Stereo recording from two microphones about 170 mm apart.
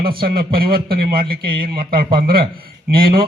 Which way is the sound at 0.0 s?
60° right (ahead or behind).